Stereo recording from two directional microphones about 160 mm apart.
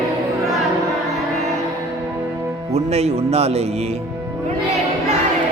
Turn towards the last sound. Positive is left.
turn(degrees=-40)  # may be behind; listen again after turning